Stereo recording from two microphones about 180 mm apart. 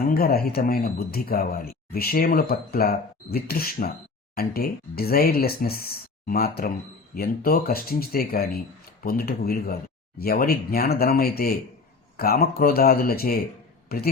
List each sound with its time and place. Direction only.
0.1 s speech: 60° left (ahead or behind)